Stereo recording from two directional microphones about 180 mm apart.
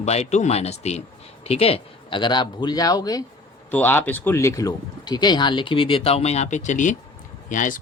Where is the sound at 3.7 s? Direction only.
10° left (ahead or behind).